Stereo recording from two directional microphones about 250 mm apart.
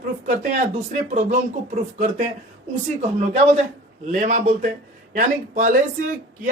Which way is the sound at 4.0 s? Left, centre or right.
Right.